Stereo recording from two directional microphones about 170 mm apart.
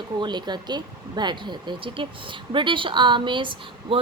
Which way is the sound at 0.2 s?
25° right (ahead or behind).